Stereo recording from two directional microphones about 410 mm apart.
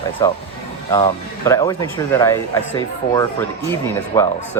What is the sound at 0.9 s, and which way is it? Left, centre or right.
Speech, centre.